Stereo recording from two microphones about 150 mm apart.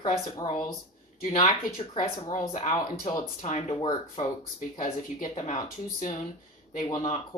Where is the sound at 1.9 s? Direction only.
55° left (ahead or behind).